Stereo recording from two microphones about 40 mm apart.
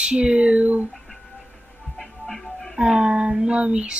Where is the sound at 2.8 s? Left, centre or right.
Centre.